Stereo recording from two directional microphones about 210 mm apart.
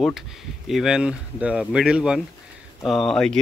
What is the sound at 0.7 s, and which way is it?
Speech, centre (ahead or behind).